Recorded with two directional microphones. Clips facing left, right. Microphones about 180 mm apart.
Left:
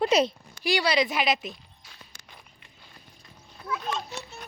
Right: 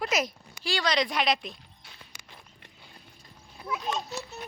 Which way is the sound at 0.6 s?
10° left (ahead or behind).